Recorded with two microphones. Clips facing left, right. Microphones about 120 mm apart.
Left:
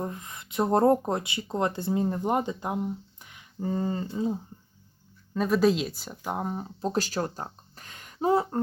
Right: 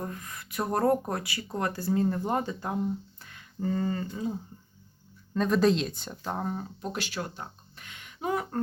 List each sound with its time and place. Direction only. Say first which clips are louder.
0.0 s speech: left 3 dB; 20° left (ahead or behind)
5.3 s speech: left 1 dB; 5° left (ahead or behind)
6.7 s speech: left 6 dB; 35° left (ahead or behind)